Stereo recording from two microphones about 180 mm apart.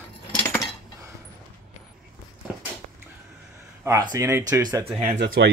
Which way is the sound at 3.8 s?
20° right (ahead or behind).